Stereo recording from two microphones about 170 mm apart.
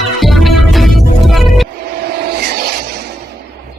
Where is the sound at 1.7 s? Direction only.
65° right (ahead or behind).